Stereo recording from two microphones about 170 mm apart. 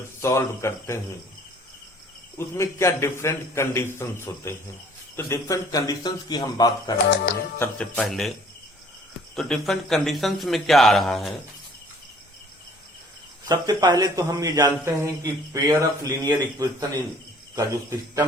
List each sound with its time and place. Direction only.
0.2 s a man's voice: 15° left (ahead or behind)
2.4 s a man's voice: 15° left (ahead or behind)
7.6 s a man's voice: 5° left (ahead or behind)
13.4 s speech: 25° right (ahead or behind)